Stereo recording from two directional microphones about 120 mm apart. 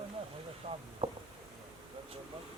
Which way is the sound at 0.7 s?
55° right (ahead or behind).